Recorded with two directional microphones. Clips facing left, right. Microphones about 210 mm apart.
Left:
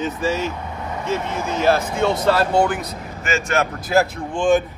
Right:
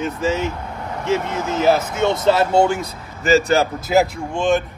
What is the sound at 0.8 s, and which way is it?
Vehicle, centre (ahead or behind).